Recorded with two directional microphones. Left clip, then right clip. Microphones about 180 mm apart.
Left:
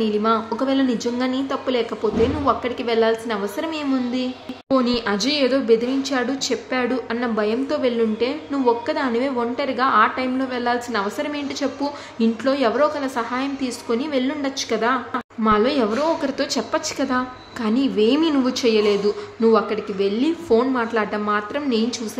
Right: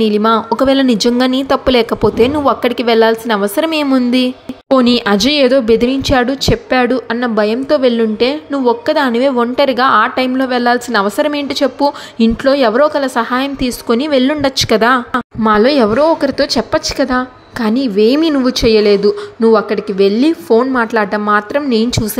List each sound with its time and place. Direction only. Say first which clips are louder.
0.0 s a woman's voice: right 8 dB; 45° right (ahead or behind)